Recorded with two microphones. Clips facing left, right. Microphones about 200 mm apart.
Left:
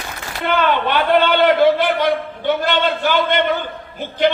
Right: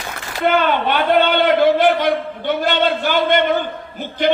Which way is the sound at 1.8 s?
50° right (ahead or behind).